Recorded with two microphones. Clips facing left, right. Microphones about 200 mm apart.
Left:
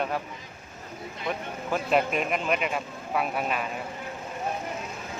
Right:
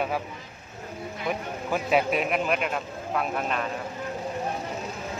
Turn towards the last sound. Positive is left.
turn(degrees=5)  # may be behind; listen again after turning